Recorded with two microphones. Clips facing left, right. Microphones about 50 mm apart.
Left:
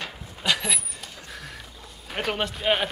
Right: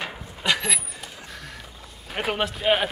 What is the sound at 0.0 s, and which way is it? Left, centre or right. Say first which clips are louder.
Vehicle: right 2 dB; centre.